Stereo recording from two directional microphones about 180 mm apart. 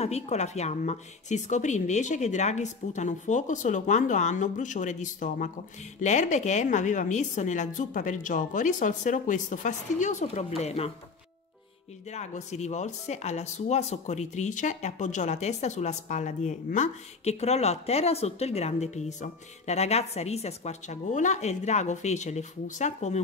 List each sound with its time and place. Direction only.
0.0 s a woman's voice: 35° left (ahead or behind)
12.1 s speech: 40° left (ahead or behind)